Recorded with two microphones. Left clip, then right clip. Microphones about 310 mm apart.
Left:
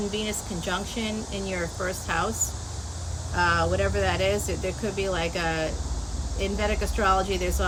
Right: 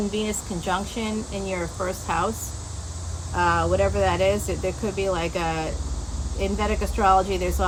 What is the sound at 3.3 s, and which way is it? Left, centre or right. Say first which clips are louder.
Speech: right 2 dB; centre.